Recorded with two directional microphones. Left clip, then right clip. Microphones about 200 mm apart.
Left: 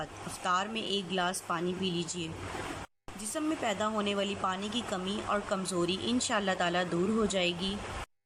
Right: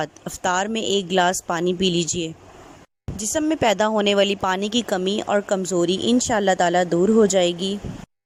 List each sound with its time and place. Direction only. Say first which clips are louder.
0.0 s speech: right 11 dB; 40° right (ahead or behind)